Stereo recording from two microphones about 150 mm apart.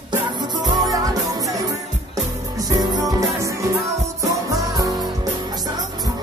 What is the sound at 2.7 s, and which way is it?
Music, 20° right (ahead or behind).